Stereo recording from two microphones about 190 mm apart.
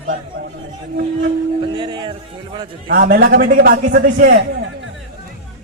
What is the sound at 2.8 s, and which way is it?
A man's voice, 55° right (ahead or behind).